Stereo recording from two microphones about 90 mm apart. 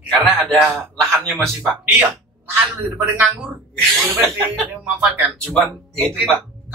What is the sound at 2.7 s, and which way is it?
Speech, 20° right (ahead or behind).